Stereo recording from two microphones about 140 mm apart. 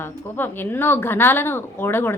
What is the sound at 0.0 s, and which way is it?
A woman's voice, 15° left (ahead or behind).